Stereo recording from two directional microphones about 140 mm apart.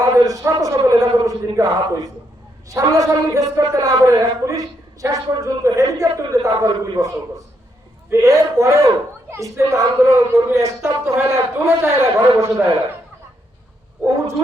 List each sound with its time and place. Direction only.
0.3 s a man's voice: 25° right (ahead or behind)